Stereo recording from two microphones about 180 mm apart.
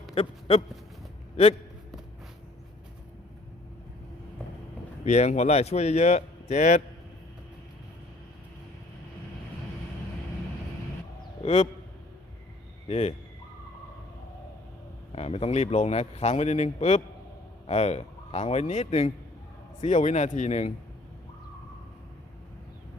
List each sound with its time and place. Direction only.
0.1 s a sound: 30° left (ahead or behind)
5.0 s speech: 40° left (ahead or behind)
11.4 s speech: 35° left (ahead or behind)
12.9 s speech: 35° left (ahead or behind)
15.1 s speech: 35° left (ahead or behind)